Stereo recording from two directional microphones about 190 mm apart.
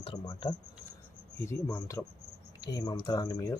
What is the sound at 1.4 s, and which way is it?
Speech, 10° left (ahead or behind).